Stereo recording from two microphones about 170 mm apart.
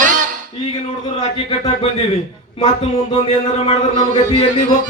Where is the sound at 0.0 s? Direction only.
50° right (ahead or behind).